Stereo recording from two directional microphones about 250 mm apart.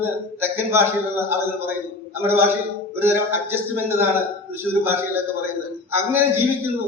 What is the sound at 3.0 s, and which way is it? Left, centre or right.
Speech, centre.